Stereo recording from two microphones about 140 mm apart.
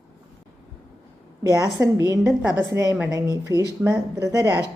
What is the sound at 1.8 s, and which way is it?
A woman's voice, 15° right (ahead or behind).